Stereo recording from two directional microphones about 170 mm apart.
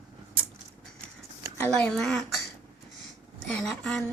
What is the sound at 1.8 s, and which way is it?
Speech, 5° left (ahead or behind).